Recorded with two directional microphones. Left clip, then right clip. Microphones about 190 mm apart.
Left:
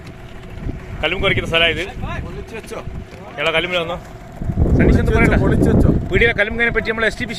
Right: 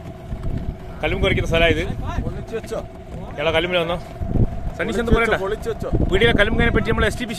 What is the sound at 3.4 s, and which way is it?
Speech, 15° right (ahead or behind).